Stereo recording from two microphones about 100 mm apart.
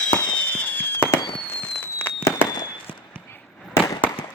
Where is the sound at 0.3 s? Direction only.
15° left (ahead or behind).